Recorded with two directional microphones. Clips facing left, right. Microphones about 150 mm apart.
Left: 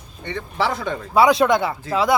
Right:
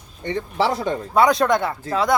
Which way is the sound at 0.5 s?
40° right (ahead or behind).